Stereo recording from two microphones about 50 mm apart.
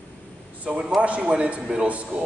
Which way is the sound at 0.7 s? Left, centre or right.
Right.